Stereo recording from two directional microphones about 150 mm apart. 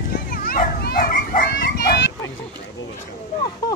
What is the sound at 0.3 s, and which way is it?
Dog, 75° left (ahead or behind).